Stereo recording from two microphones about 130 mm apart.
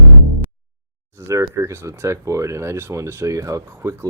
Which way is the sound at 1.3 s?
20° right (ahead or behind).